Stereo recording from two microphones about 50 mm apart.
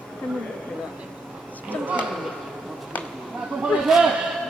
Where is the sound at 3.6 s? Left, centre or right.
Centre.